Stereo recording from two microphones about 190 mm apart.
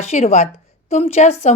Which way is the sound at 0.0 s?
35° left (ahead or behind).